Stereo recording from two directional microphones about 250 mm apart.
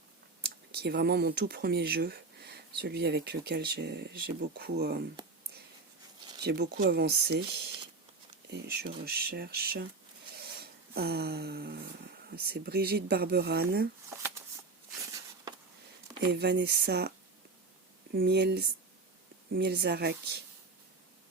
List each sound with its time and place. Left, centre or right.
0.4 s speech: right
6.4 s speech: right
8.7 s speech: right
10.3 s a sound: right
12.3 s speech: right
16.3 s speech: right
18.1 s speech: right